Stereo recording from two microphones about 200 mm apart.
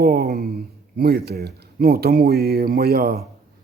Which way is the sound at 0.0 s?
50° right (ahead or behind).